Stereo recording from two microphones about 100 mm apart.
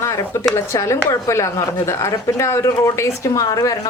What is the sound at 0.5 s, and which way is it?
A woman's voice, 30° left (ahead or behind).